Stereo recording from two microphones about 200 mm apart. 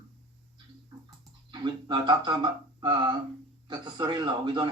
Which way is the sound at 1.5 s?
20° right (ahead or behind).